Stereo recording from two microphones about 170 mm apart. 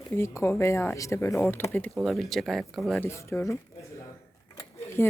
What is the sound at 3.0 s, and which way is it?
Speech, 15° left (ahead or behind).